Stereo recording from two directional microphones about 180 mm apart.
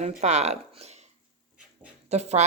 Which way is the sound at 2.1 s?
35° right (ahead or behind).